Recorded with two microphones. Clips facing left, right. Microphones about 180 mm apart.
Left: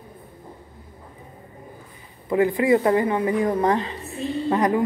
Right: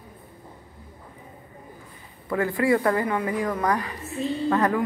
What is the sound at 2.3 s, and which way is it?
A woman's voice, 20° left (ahead or behind).